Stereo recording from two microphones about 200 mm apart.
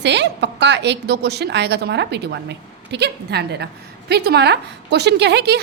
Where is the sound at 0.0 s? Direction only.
60° right (ahead or behind).